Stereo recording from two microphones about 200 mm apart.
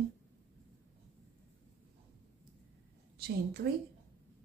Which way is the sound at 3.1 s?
50° right (ahead or behind).